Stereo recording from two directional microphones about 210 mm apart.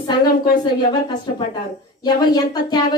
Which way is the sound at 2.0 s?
20° left (ahead or behind).